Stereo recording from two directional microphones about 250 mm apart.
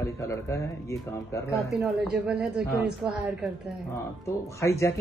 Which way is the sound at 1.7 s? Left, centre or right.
Centre.